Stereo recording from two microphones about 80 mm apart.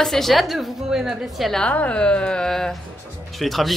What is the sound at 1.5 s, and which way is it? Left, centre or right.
A woman's voice, centre.